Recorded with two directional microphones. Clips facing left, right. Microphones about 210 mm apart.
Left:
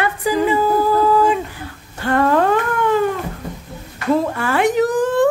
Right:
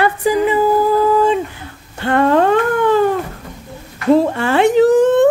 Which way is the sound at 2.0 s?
25° right (ahead or behind).